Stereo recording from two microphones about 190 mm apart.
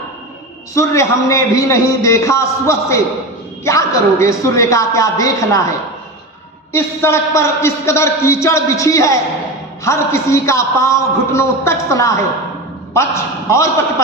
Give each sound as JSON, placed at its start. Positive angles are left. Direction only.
{"t": 0.7, "sound": "speech", "side_deg": 15}
{"t": 6.7, "sound": "speech", "side_deg": 15}